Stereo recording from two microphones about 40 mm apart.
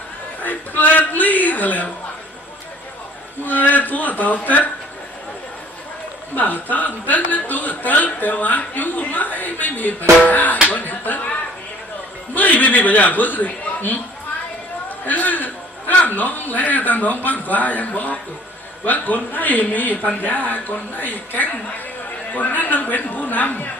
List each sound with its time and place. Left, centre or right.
0.4 s a woman's voice: left
3.4 s a woman's voice: left
6.3 s a woman's voice: left